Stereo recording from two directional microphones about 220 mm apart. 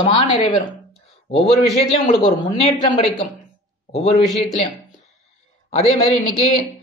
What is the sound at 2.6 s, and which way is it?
Speech, 25° left (ahead or behind).